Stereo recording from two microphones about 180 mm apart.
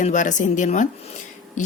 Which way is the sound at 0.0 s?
45° left (ahead or behind).